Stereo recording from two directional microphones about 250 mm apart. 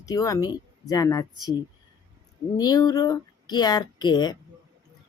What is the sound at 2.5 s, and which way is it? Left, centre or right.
Speech, centre.